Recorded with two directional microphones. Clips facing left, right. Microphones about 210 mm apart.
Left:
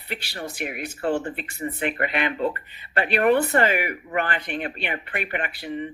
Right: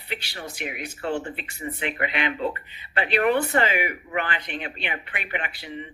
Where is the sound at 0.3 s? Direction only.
50° left (ahead or behind).